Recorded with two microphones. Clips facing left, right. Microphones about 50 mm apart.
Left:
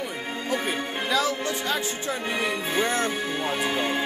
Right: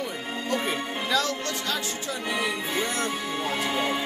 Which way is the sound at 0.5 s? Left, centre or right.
Centre.